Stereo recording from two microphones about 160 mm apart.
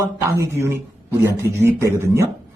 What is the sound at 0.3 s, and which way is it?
A man's voice, 15° right (ahead or behind).